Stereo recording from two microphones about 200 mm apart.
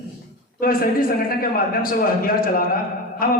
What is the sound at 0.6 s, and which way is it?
Speech, 45° left (ahead or behind).